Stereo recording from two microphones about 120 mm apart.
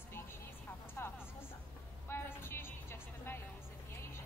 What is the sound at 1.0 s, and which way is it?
Music, 20° left (ahead or behind).